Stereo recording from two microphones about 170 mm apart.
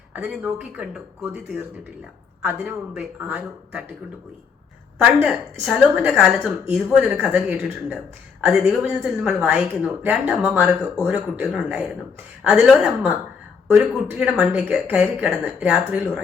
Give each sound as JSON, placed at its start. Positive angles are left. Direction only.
{"t": 0.1, "sound": "speech", "side_deg": -5}
{"t": 5.6, "sound": "a woman's voice", "side_deg": -5}
{"t": 8.6, "sound": "speech", "side_deg": -15}
{"t": 9.0, "sound": "speech", "side_deg": -5}